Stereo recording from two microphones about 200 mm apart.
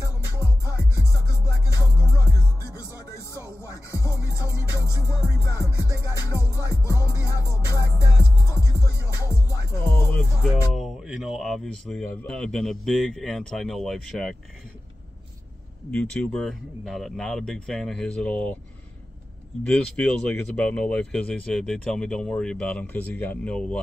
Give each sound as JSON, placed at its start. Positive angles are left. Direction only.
{"t": 1.4, "sound": "music", "side_deg": 15}
{"t": 3.9, "sound": "music", "side_deg": 15}
{"t": 5.8, "sound": "music", "side_deg": -15}
{"t": 6.7, "sound": "music", "side_deg": 15}
{"t": 15.9, "sound": "speech", "side_deg": 5}
{"t": 19.6, "sound": "speech", "side_deg": 5}